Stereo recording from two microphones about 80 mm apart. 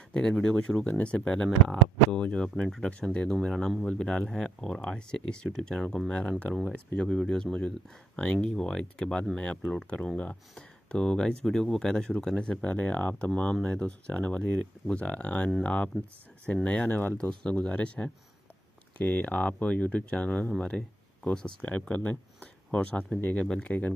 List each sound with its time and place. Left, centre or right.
0.1 s speech: centre